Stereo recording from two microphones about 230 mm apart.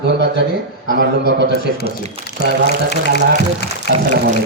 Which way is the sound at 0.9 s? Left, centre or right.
Right.